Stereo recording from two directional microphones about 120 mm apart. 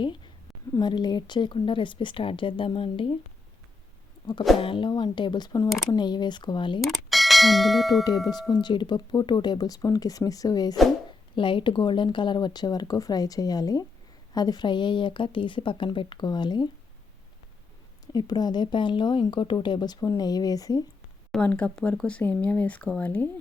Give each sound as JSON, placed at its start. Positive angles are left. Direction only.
{"t": 0.7, "sound": "speech", "side_deg": 35}
{"t": 4.6, "sound": "speech", "side_deg": 45}
{"t": 6.8, "sound": "speech", "side_deg": 0}
{"t": 8.3, "sound": "speech", "side_deg": 35}
{"t": 11.3, "sound": "speech", "side_deg": 45}
{"t": 18.0, "sound": "speech", "side_deg": 35}
{"t": 21.3, "sound": "speech", "side_deg": 10}